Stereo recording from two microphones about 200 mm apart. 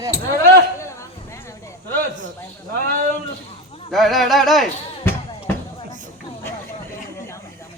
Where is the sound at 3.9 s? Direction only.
Centre (ahead or behind).